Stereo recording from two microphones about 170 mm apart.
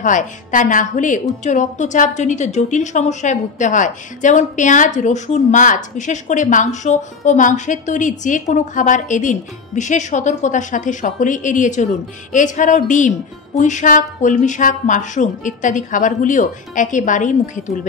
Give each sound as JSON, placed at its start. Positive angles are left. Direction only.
{"t": 0.0, "sound": "a woman's voice", "side_deg": 50}